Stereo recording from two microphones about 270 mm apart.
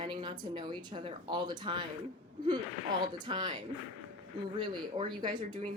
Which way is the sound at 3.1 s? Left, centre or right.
Centre.